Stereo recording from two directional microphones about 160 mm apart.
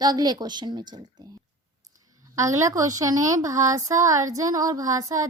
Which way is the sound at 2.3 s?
20° right (ahead or behind).